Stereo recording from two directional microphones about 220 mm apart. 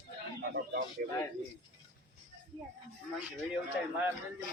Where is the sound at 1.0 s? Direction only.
45° right (ahead or behind).